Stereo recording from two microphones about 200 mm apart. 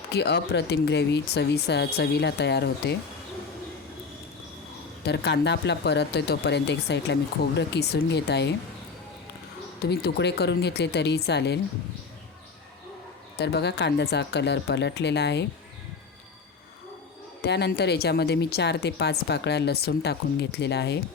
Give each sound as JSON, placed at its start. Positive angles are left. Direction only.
{"t": 0.1, "sound": "speech", "side_deg": 55}
{"t": 5.0, "sound": "speech", "side_deg": 60}
{"t": 9.9, "sound": "speech", "side_deg": 55}
{"t": 13.4, "sound": "speech", "side_deg": 55}
{"t": 17.4, "sound": "speech", "side_deg": 55}